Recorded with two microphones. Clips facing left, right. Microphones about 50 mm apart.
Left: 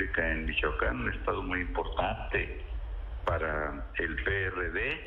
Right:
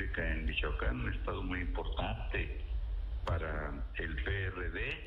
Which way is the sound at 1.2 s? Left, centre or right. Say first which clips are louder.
Left 7 dB; left.